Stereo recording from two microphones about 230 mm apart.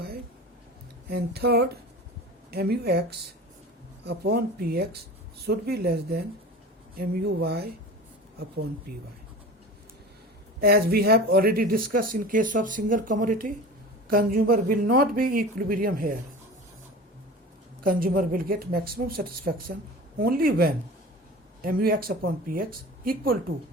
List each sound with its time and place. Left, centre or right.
1.1 s speech: right
8.9 s speech: right
10.6 s speech: right
17.8 s speech: right